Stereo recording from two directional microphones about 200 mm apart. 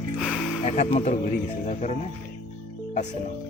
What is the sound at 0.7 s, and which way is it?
Speech, 35° left (ahead or behind).